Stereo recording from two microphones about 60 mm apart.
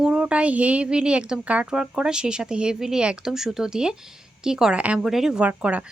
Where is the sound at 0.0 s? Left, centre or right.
Centre.